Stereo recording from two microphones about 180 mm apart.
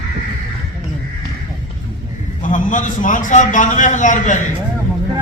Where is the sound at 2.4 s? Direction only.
45° left (ahead or behind).